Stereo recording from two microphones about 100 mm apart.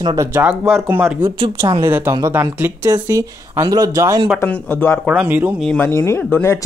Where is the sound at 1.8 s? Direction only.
30° right (ahead or behind).